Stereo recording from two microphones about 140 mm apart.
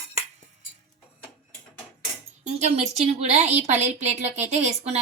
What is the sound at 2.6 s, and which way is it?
A woman's voice, 50° right (ahead or behind).